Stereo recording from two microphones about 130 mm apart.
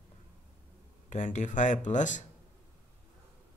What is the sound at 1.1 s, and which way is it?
Speech, 65° left (ahead or behind).